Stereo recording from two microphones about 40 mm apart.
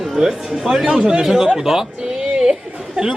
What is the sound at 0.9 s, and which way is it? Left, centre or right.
Speech, centre.